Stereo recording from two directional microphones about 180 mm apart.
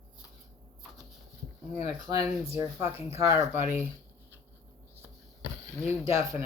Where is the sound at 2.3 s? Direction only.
15° right (ahead or behind).